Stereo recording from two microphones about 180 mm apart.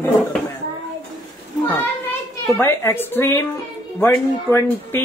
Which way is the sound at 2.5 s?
15° left (ahead or behind).